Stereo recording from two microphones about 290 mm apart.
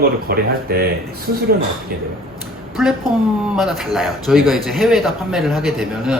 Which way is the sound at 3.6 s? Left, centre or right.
Centre.